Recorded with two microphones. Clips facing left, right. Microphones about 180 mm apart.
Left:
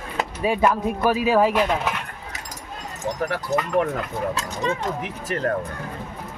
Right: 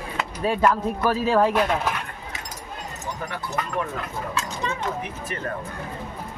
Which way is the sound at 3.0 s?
75° left (ahead or behind).